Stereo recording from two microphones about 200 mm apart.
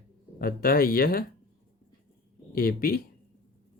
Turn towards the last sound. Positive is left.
turn(degrees=45)  # may be behind; listen again after turning